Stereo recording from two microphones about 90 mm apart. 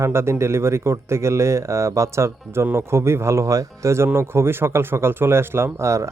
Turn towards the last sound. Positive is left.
turn(degrees=-35)  # may be behind; listen again after turning